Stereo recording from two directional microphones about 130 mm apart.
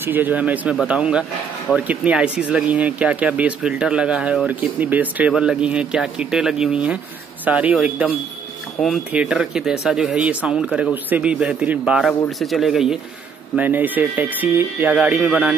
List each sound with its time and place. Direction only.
0.0 s speech: 15° right (ahead or behind)
8.7 s speech: centre (ahead or behind)
9.1 s speech: 10° right (ahead or behind)
13.6 s speech: 15° right (ahead or behind)